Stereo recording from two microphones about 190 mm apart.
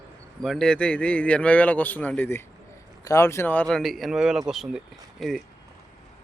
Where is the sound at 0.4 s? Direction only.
Centre (ahead or behind).